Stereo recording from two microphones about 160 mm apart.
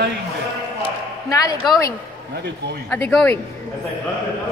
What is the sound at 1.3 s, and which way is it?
Speech, 20° left (ahead or behind).